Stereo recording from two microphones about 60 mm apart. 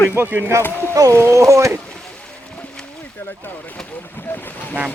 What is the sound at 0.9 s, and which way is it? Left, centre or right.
Speech, right.